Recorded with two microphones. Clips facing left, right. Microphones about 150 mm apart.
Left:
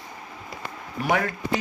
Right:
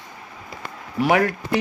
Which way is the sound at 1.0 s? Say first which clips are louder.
Right 6 dB; 75° right (ahead or behind).